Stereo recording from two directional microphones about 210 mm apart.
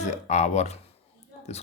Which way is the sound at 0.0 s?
35° left (ahead or behind).